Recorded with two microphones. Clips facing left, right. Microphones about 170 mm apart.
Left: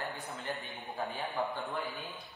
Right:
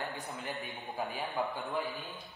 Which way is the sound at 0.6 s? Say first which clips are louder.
Right 1 dB; 15° right (ahead or behind).